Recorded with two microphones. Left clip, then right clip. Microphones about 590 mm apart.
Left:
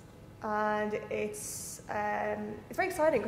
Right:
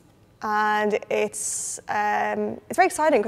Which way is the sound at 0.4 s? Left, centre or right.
Right.